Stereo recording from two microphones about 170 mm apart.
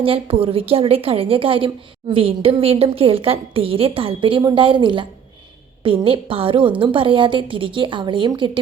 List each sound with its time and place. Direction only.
0.0 s a woman's voice: 35° right (ahead or behind)